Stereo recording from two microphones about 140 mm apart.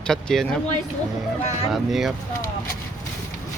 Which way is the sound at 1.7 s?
Centre (ahead or behind).